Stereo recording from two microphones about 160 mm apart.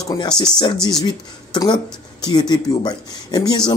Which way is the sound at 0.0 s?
25° left (ahead or behind).